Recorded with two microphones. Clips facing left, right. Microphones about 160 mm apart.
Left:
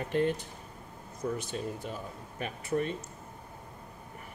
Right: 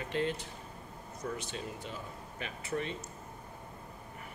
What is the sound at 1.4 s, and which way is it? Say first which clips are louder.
Speech: left 5 dB; 50° left (ahead or behind).